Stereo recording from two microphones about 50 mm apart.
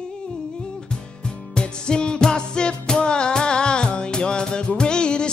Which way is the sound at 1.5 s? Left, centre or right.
Centre.